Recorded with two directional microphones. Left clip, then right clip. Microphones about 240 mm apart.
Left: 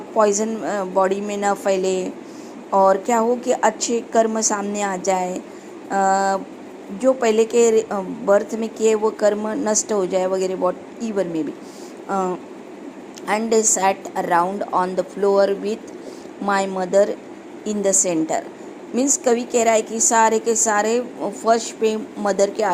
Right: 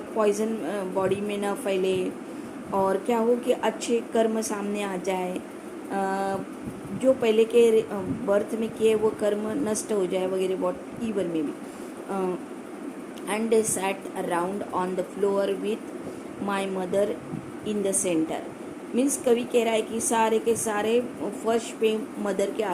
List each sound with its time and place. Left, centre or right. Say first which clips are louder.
0.2 s a woman's voice: left 7 dB; centre
13.2 s a woman's voice: left 6 dB; left